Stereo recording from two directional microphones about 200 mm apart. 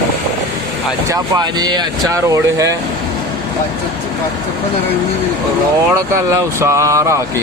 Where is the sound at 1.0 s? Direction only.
20° right (ahead or behind).